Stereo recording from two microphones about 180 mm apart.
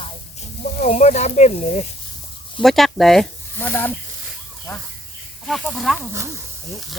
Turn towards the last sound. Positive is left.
turn(degrees=0)  # may be behind; listen again after turning